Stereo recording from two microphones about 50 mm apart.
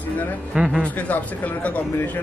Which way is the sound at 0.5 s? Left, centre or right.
Centre.